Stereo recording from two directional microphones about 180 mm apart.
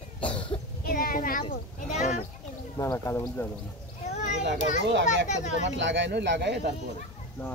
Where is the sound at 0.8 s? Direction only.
50° left (ahead or behind).